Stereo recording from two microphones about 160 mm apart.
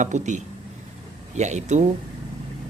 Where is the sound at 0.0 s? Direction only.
50° right (ahead or behind).